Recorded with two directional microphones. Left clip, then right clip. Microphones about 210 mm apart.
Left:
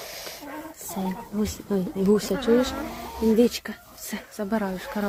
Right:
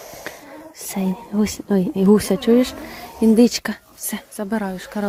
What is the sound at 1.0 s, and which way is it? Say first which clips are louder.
A woman's voice: right 6 dB; 25° right (ahead or behind).